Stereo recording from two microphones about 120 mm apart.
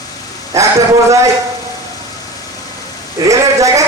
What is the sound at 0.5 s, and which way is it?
Speech, 25° right (ahead or behind).